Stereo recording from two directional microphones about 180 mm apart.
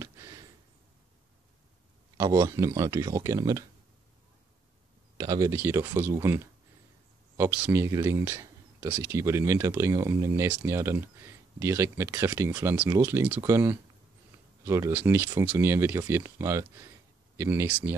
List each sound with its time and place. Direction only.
0.0 s a sound: 15° right (ahead or behind)
2.1 s speech: 20° right (ahead or behind)
5.1 s speech: 20° right (ahead or behind)